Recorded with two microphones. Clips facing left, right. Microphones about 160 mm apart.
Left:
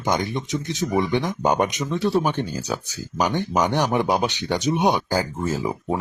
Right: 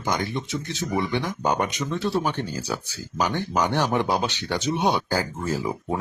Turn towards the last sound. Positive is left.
turn(degrees=15)  # may be behind; listen again after turning